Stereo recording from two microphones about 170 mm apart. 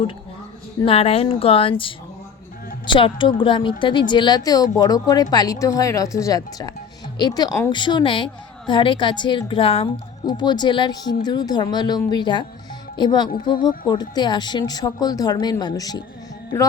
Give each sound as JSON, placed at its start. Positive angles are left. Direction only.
{"t": 0.9, "sound": "a woman's voice", "side_deg": 35}